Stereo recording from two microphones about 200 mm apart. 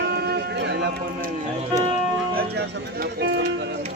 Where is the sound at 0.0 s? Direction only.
55° right (ahead or behind).